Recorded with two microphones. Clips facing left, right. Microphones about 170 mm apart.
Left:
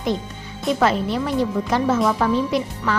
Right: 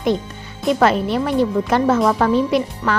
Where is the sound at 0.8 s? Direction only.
60° right (ahead or behind).